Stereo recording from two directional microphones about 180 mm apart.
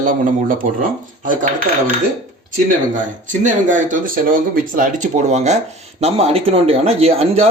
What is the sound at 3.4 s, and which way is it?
A man's voice, 45° right (ahead or behind).